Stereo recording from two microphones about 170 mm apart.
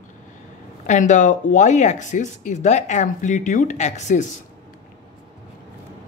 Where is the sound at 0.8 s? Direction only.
45° left (ahead or behind).